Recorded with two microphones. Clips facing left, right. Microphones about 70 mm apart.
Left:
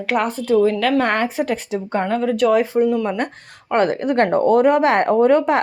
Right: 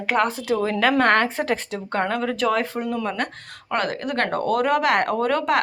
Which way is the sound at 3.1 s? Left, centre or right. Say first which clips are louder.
Left 4 dB; left.